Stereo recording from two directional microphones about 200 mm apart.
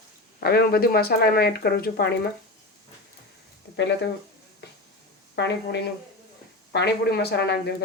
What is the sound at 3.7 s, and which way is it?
Speech, 60° left (ahead or behind).